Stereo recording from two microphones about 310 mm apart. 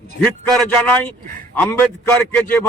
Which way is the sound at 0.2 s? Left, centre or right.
Centre.